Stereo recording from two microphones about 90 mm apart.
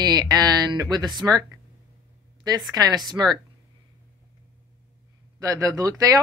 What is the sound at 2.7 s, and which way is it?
Speech, 45° right (ahead or behind).